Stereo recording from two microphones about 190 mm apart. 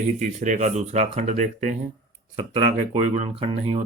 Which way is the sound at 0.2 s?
40° right (ahead or behind).